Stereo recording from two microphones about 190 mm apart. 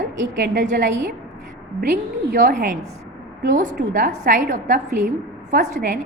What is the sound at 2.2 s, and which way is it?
A woman's voice, 50° right (ahead or behind).